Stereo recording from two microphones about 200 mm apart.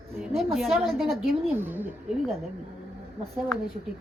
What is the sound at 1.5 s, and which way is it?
Speech, 10° right (ahead or behind).